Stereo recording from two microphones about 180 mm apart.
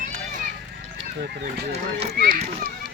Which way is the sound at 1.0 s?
65° right (ahead or behind).